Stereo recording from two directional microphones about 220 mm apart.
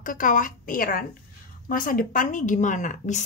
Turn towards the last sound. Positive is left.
turn(degrees=35)  # may be behind; listen again after turning